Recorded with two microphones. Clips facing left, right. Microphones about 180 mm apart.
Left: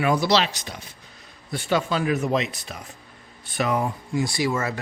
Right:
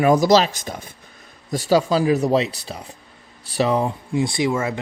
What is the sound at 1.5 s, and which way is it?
A man's voice, 35° right (ahead or behind).